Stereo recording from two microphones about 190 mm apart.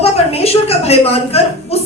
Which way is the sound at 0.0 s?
30° left (ahead or behind).